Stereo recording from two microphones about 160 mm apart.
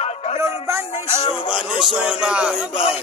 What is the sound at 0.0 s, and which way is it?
Music, 45° left (ahead or behind).